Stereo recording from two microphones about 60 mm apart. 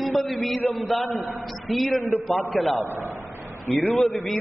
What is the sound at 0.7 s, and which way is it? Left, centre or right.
A man's voice, centre.